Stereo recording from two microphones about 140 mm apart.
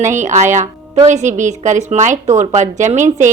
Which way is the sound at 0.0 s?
60° right (ahead or behind).